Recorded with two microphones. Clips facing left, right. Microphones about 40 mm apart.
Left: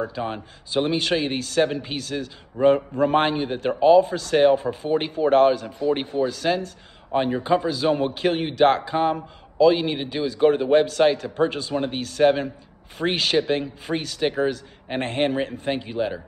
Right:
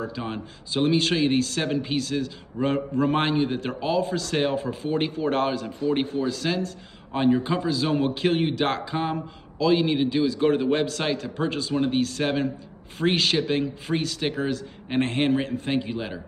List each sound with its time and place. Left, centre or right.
0.3 s a man's voice: centre
5.1 s a man's voice: left
7.1 s a man's voice: centre
8.5 s a man's voice: left
9.9 s a man's voice: left; by 14.3 s centre
15.0 s a man's voice: left
15.2 s a man's voice: centre